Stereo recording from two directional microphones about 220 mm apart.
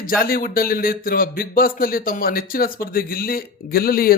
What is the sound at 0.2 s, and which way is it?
A man's voice, 40° left (ahead or behind).